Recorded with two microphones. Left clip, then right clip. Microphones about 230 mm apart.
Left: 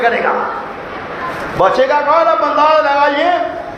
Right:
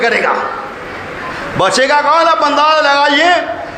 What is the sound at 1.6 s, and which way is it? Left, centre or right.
A man's voice, right.